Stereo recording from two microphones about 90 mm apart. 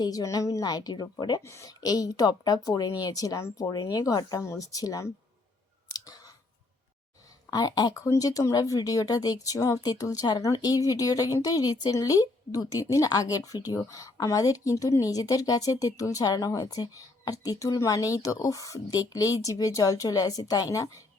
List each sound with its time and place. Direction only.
0.0 s speech: 45° left (ahead or behind)
1.4 s a woman's voice: 30° left (ahead or behind)
1.8 s a woman's voice: 45° left (ahead or behind)
5.9 s clicking: 45° left (ahead or behind)
7.5 s speech: 50° left (ahead or behind)
8.0 s a woman's voice: 35° left (ahead or behind)